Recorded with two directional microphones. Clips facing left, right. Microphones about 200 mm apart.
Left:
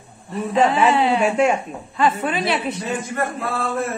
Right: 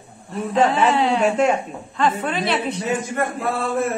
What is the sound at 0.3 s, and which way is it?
A man's voice, centre (ahead or behind).